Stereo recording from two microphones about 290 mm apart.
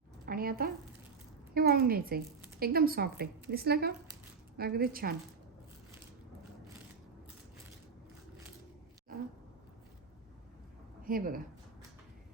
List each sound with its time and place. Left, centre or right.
0.3 s a woman's voice: right
11.0 s speech: right